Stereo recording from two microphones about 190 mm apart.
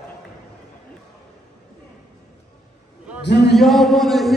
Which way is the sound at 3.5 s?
Centre (ahead or behind).